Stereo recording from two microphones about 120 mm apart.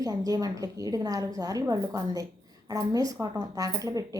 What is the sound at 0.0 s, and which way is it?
A woman's voice, 30° right (ahead or behind).